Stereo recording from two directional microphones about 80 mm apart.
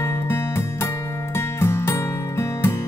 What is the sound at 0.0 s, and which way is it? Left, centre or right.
Music, left.